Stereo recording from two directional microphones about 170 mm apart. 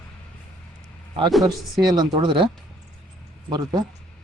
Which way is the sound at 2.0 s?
25° right (ahead or behind).